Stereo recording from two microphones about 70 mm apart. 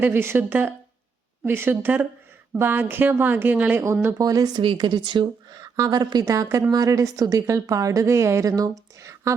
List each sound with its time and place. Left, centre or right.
0.0 s a woman's voice: right
4.2 s speech: right
6.2 s a woman's voice: right